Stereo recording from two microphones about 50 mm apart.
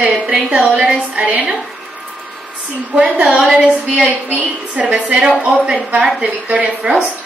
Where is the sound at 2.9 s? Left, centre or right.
Right.